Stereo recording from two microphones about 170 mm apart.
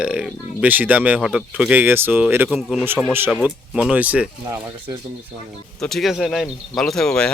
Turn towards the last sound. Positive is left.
turn(degrees=5)  # may be behind; listen again after turning